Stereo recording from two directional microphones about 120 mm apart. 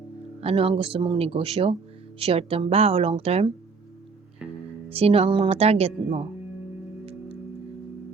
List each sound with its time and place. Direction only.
0.4 s speech: 50° right (ahead or behind)
4.9 s a woman's voice: 55° right (ahead or behind)
7.0 s music: 55° right (ahead or behind)